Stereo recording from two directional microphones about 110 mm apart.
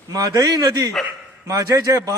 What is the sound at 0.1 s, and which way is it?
A man's voice, 35° right (ahead or behind).